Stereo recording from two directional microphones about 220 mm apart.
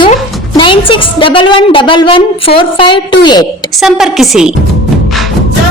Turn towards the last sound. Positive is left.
turn(degrees=0)  # may be behind; listen again after turning